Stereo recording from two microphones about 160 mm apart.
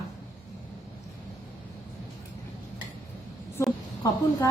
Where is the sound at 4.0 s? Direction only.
20° left (ahead or behind).